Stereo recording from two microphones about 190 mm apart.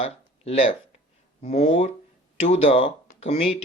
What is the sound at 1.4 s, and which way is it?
Speech, 30° left (ahead or behind).